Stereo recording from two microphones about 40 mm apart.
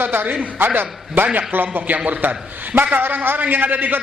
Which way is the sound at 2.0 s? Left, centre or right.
Right.